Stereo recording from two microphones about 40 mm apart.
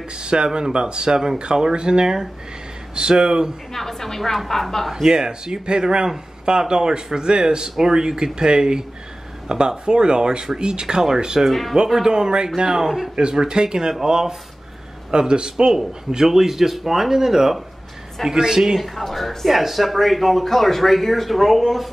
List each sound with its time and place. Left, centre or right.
0.2 s speech: right
3.7 s a woman's voice: centre
5.0 s speech: centre
11.4 s speech: centre
11.9 s a man's voice: centre
13.1 s a man's voice: right
18.8 s speech: centre